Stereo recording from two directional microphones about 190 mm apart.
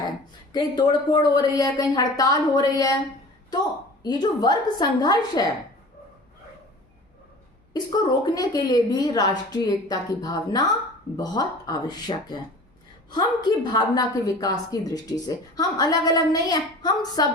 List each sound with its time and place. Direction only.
0.5 s a woman's voice: 25° left (ahead or behind)
4.0 s a woman's voice: 20° left (ahead or behind)
7.7 s a woman's voice: 20° left (ahead or behind)